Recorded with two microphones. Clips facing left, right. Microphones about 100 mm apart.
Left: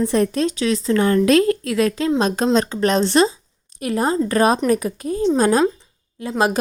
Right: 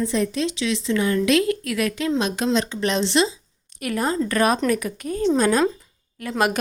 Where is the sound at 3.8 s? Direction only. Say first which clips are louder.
Left 4 dB; 30° left (ahead or behind).